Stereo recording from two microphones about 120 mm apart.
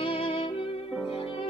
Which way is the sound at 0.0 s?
50° left (ahead or behind).